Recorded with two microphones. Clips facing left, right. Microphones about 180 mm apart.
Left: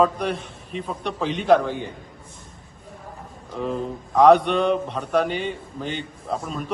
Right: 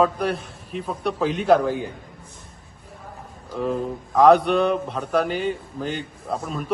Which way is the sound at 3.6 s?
Centre (ahead or behind).